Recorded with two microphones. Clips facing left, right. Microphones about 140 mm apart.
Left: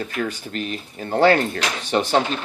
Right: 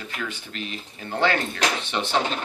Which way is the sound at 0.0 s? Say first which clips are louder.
Left 7 dB; 45° left (ahead or behind).